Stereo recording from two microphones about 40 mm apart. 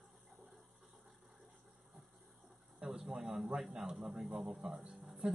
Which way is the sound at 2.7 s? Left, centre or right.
Right.